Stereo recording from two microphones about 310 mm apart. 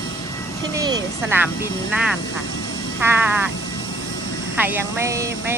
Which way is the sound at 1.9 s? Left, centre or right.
Centre.